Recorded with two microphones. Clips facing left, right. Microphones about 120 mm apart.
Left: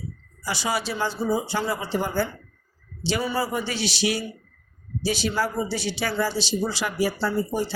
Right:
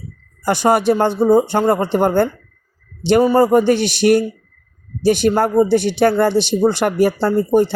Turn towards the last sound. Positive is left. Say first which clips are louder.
# right 11 dB
turn(degrees=-60)  # may be behind; listen again after turning